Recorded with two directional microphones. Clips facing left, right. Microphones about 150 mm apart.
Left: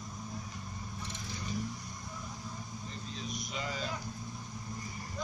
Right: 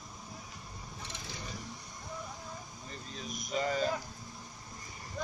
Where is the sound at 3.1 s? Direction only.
45° right (ahead or behind).